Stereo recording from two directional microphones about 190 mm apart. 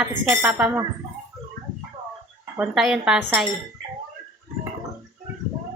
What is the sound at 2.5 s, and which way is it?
Speech, 5° right (ahead or behind).